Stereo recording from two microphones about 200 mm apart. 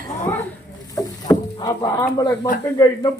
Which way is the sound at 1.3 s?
20° left (ahead or behind).